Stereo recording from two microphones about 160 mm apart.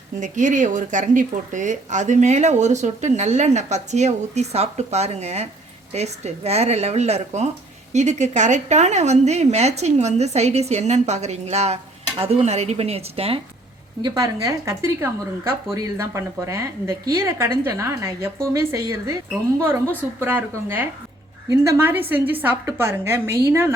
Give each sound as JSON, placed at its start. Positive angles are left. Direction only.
{"t": 0.2, "sound": "speech", "side_deg": -50}
{"t": 14.1, "sound": "a woman's voice", "side_deg": -20}